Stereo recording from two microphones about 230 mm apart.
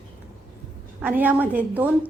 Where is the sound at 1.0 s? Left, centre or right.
Centre.